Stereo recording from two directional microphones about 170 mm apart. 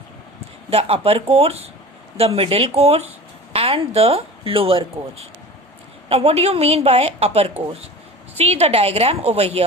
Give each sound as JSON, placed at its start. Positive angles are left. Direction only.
{"t": 0.7, "sound": "speech", "side_deg": -35}